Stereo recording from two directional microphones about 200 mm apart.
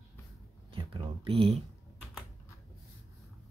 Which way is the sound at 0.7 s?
25° right (ahead or behind).